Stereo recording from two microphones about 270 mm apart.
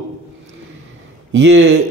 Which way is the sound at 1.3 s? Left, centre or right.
Right.